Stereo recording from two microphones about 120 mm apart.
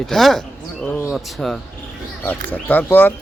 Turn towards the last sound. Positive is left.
turn(degrees=15)  # may be behind; listen again after turning